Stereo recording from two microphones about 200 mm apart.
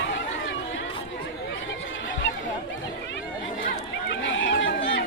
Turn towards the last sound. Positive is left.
turn(degrees=70)  # may be behind; listen again after turning